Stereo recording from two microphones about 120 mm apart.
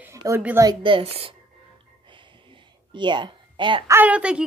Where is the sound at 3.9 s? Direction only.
15° right (ahead or behind).